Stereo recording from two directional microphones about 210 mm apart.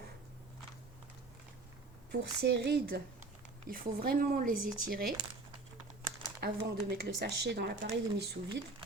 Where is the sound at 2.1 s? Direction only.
55° right (ahead or behind).